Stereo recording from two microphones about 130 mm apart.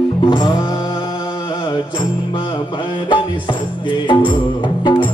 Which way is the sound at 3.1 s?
40° left (ahead or behind).